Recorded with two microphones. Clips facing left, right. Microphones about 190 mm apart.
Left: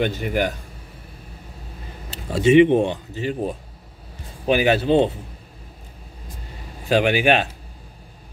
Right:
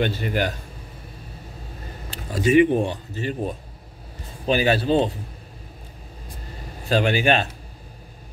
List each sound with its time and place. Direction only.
0.0 s a man's voice: 15° left (ahead or behind)
2.3 s a man's voice: 25° left (ahead or behind)
6.9 s a man's voice: 10° left (ahead or behind)